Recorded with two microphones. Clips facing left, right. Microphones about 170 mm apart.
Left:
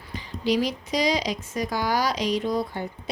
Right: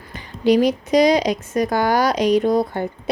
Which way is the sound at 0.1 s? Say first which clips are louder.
Right 8 dB; 55° right (ahead or behind).